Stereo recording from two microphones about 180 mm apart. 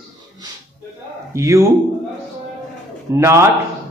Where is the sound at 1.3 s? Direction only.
15° right (ahead or behind).